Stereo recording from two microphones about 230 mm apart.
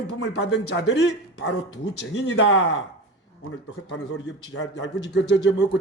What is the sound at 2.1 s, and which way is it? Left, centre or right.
Speech, left.